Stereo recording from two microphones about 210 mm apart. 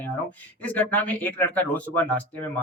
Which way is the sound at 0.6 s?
5° left (ahead or behind).